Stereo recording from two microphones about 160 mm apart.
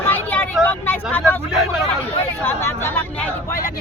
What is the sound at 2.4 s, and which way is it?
Speech, 15° left (ahead or behind).